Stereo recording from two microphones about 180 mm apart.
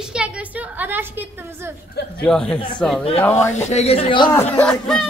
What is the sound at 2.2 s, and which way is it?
Speech, 5° left (ahead or behind).